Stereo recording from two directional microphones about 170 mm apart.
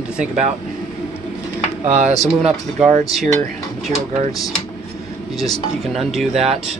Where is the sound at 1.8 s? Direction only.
45° right (ahead or behind).